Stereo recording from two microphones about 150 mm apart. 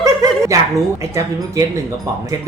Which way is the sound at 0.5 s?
20° right (ahead or behind).